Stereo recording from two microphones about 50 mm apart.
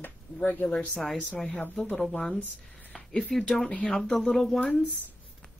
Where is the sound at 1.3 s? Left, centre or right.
Centre.